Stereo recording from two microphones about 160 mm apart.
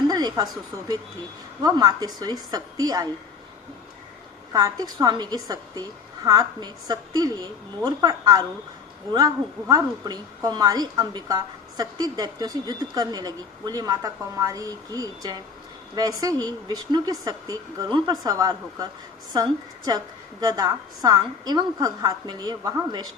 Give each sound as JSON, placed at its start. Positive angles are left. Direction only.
{"t": 0.1, "sound": "a woman's voice", "side_deg": -25}
{"t": 4.5, "sound": "a woman's voice", "side_deg": -25}